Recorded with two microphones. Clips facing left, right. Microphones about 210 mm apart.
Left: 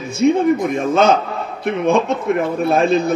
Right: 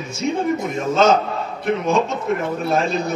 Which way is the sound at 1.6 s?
55° left (ahead or behind).